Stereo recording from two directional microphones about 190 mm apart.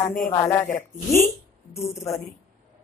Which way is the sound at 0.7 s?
45° left (ahead or behind).